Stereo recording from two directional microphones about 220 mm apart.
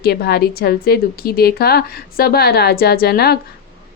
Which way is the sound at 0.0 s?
45° left (ahead or behind).